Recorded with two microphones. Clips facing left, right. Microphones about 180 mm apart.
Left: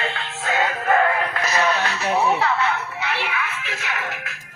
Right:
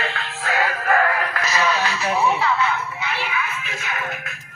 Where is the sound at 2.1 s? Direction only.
60° left (ahead or behind).